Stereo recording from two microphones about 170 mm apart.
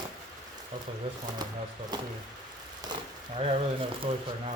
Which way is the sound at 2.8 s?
30° right (ahead or behind).